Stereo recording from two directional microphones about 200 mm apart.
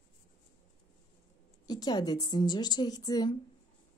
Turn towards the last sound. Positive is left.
turn(degrees=20)  # may be behind; listen again after turning